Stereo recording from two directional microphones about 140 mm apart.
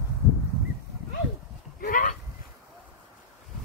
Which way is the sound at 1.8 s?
75° left (ahead or behind).